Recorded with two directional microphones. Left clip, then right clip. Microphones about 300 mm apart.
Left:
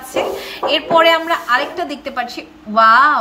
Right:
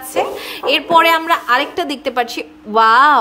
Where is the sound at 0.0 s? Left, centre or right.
Centre.